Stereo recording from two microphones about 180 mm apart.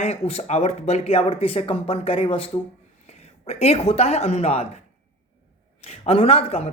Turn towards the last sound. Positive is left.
turn(degrees=35)  # may be behind; listen again after turning